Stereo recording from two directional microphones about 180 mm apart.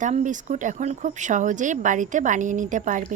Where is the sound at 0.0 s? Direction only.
45° right (ahead or behind).